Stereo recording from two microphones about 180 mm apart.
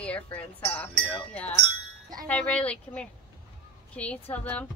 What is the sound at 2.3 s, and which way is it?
A woman's voice, 5° left (ahead or behind).